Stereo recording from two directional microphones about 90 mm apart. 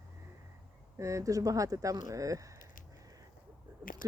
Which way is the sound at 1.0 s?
35° right (ahead or behind).